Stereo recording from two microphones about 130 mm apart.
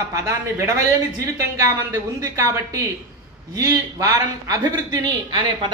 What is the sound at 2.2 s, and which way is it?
A man's voice, 25° right (ahead or behind).